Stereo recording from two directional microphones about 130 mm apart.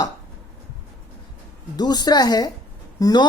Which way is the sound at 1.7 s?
30° left (ahead or behind).